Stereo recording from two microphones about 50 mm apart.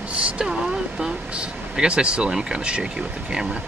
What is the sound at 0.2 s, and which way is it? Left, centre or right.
Speech, centre.